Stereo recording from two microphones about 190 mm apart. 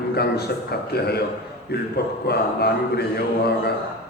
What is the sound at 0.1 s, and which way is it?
A man's voice, 55° left (ahead or behind).